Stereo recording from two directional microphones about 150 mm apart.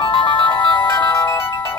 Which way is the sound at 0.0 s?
35° left (ahead or behind).